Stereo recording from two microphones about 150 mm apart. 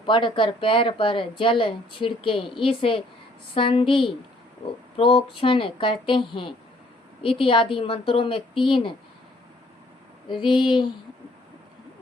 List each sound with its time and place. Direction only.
0.0 s a woman's voice: 35° left (ahead or behind)
10.4 s a woman's voice: 30° left (ahead or behind)